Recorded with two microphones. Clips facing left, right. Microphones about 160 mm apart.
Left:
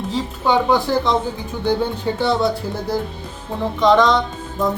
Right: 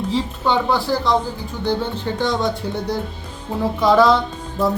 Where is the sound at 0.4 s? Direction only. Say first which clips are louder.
Left 4 dB; 15° left (ahead or behind).